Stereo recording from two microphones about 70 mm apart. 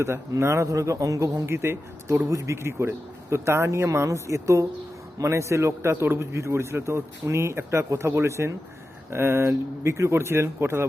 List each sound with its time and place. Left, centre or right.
0.0 s a man's voice: right
1.5 s a man's voice: right